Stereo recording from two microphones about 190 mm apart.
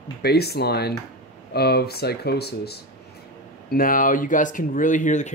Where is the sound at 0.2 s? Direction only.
60° left (ahead or behind).